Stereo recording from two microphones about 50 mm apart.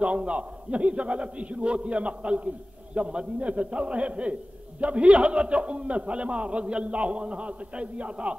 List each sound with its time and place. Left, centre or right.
0.0 s a man's voice: right